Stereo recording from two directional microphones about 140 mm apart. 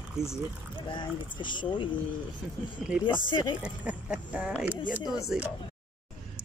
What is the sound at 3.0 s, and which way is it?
Speech, 35° left (ahead or behind).